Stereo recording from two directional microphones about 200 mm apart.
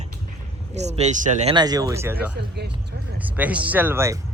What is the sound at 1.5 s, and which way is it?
Speech, 20° right (ahead or behind).